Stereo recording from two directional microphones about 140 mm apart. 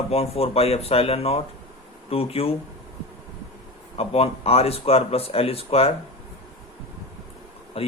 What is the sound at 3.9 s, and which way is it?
Speech, 45° left (ahead or behind).